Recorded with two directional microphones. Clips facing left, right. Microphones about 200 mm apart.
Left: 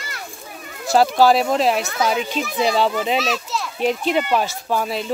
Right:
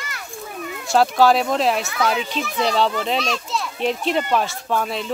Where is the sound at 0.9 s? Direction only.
Centre (ahead or behind).